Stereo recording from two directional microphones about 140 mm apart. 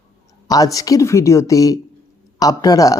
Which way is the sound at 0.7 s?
25° left (ahead or behind).